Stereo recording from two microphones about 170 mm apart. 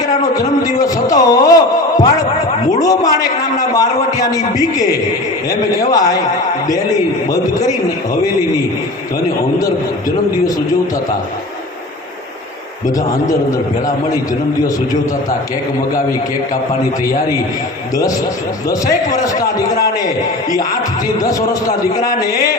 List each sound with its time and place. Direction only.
0.6 s a man's voice: 20° left (ahead or behind)
1.1 s a sound: 20° left (ahead or behind)
2.8 s a man's voice: 20° left (ahead or behind)
18.7 s a man's voice: 20° left (ahead or behind)
21.2 s a man's voice: 20° left (ahead or behind)